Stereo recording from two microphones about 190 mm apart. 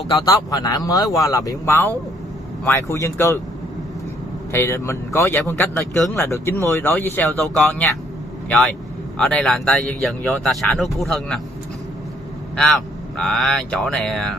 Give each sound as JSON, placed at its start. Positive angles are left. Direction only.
{"t": 0.2, "sound": "speech", "side_deg": 20}
{"t": 4.5, "sound": "speech", "side_deg": 15}
{"t": 9.2, "sound": "speech", "side_deg": 5}
{"t": 12.5, "sound": "speech", "side_deg": 5}